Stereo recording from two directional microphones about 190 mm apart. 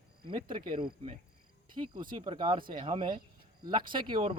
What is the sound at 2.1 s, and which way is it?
Speech, 30° right (ahead or behind).